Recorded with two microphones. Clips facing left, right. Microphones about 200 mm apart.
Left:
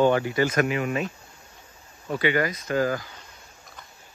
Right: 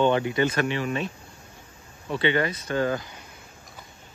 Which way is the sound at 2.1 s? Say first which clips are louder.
Even; 25° right (ahead or behind).